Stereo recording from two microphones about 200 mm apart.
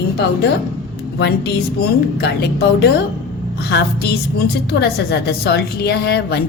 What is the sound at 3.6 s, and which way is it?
A woman's voice, 55° left (ahead or behind).